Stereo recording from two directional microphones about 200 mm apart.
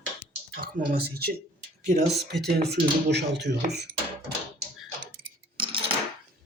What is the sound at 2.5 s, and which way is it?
Speech, 55° right (ahead or behind).